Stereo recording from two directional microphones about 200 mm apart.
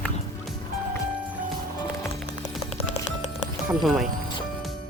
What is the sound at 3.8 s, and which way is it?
Speech, centre (ahead or behind).